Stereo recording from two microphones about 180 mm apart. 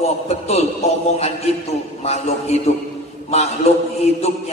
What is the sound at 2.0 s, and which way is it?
Speech, 35° left (ahead or behind).